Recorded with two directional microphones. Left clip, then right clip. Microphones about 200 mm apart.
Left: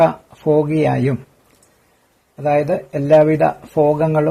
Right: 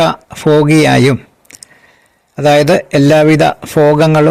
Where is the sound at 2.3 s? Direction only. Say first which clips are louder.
Right 8 dB; 40° right (ahead or behind).